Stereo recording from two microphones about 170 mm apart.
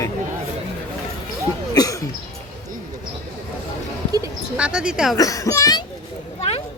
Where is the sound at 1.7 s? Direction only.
20° left (ahead or behind).